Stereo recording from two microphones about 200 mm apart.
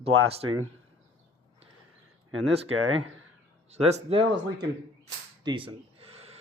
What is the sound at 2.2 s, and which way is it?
Speech, 90° right.